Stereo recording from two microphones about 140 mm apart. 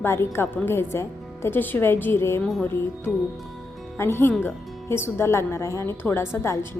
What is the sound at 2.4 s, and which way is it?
A woman's voice, 5° left (ahead or behind).